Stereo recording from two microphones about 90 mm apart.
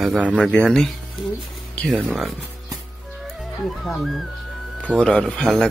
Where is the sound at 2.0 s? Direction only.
Centre (ahead or behind).